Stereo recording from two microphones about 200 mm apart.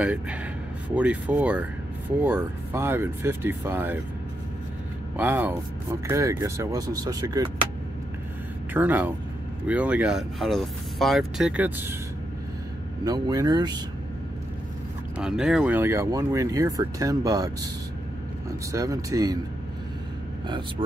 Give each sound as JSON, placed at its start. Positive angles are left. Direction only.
{"t": 0.0, "sound": "speech", "side_deg": -5}
{"t": 5.1, "sound": "speech", "side_deg": -10}
{"t": 8.7, "sound": "speech", "side_deg": -10}
{"t": 13.0, "sound": "speech", "side_deg": -20}
{"t": 15.1, "sound": "speech", "side_deg": -5}